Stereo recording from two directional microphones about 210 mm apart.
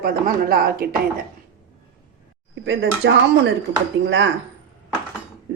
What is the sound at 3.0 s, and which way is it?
Speech, 55° right (ahead or behind).